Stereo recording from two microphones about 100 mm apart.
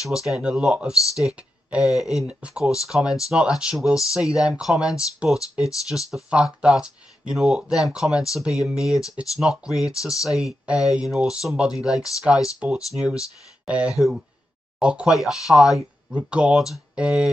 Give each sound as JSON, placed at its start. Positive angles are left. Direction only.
{"t": 0.1, "sound": "speech", "side_deg": -5}
{"t": 9.0, "sound": "speech", "side_deg": 35}
{"t": 9.4, "sound": "speech", "side_deg": -5}